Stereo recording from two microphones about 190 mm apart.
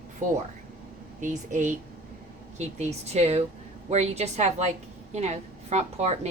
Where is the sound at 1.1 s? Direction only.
40° right (ahead or behind).